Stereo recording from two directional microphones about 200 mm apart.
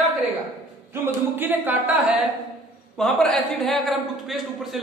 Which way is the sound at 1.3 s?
10° right (ahead or behind).